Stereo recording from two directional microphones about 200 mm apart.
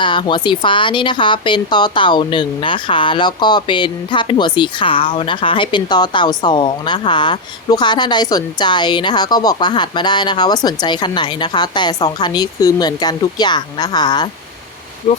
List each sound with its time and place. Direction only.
0.0 s speech: 25° left (ahead or behind)
15.1 s speech: 35° left (ahead or behind)